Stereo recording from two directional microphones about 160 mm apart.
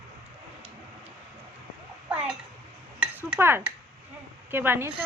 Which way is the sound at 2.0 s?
10° right (ahead or behind).